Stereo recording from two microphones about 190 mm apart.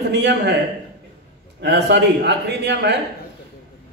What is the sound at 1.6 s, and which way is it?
A man's voice, 65° right (ahead or behind).